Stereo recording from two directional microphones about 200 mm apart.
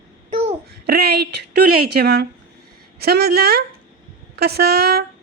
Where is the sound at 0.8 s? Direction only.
55° right (ahead or behind).